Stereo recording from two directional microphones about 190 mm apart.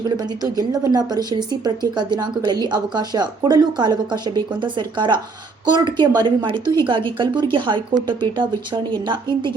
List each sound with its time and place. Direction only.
0.0 s a woman's voice: 20° right (ahead or behind)